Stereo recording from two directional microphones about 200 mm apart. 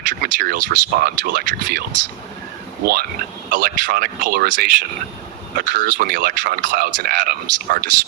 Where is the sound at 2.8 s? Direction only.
50° right (ahead or behind).